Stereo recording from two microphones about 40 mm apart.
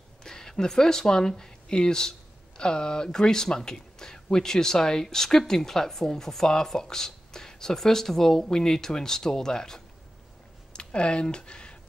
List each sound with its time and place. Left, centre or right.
0.2 s speech: centre
10.7 s speech: left